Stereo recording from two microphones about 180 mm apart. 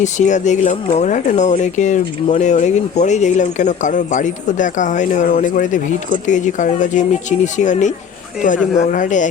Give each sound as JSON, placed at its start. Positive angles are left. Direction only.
{"t": 0.0, "sound": "speech", "side_deg": 40}